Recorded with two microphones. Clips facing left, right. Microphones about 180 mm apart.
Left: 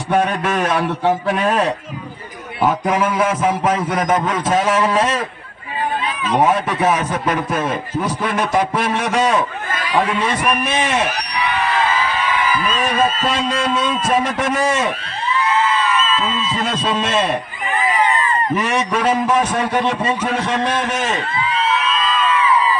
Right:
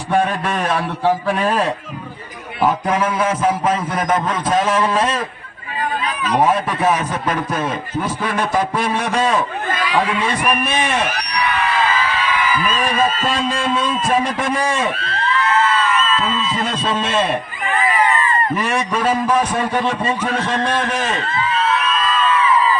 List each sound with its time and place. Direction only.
1.0 s a man's voice: centre (ahead or behind)
3.8 s a man's voice: 25° left (ahead or behind)
6.3 s a man's voice: 5° left (ahead or behind)
8.4 s a man's voice: 5° left (ahead or behind)
13.2 s a man's voice: centre (ahead or behind)
14.9 s a sound: 15° left (ahead or behind)
18.5 s a man's voice: centre (ahead or behind)
19.0 s a man's voice: 25° left (ahead or behind)
20.2 s a man's voice: 10° left (ahead or behind)